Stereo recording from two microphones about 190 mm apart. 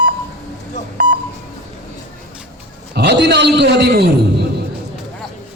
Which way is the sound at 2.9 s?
60° right (ahead or behind).